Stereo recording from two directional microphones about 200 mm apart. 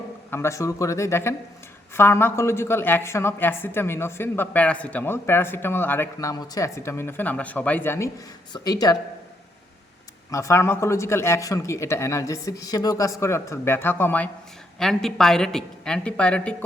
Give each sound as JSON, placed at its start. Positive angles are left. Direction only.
{"t": 0.3, "sound": "a woman's voice", "side_deg": 15}
{"t": 10.3, "sound": "a woman's voice", "side_deg": 15}